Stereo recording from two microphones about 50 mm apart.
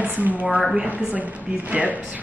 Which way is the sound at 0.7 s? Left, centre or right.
Centre.